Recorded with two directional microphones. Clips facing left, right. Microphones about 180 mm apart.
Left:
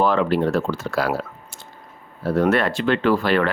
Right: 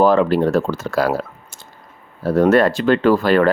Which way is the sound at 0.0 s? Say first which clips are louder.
Right 5 dB; 40° right (ahead or behind).